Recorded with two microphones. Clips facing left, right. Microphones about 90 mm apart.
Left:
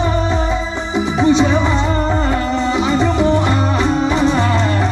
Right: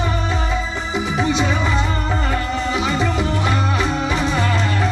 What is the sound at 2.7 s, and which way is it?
Music, centre (ahead or behind).